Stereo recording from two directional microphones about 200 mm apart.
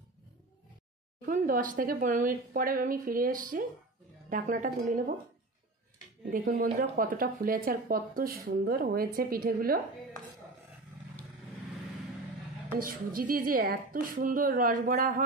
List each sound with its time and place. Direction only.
1.2 s speech: 45° right (ahead or behind)
6.3 s speech: 50° right (ahead or behind)
12.7 s speech: 45° right (ahead or behind)